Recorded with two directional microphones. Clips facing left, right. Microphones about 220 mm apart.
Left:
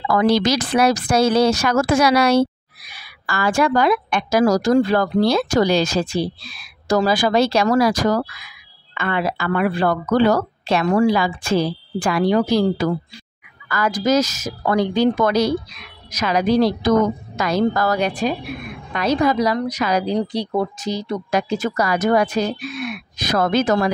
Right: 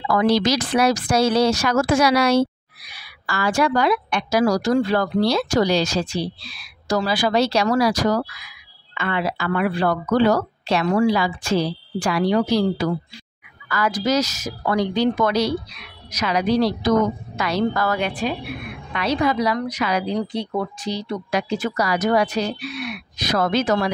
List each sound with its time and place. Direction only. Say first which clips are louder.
0.1 s a woman's voice: left 1 dB; 50° left (ahead or behind)